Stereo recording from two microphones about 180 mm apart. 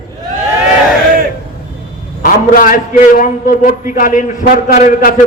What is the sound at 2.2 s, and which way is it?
A man's voice, 50° left (ahead or behind).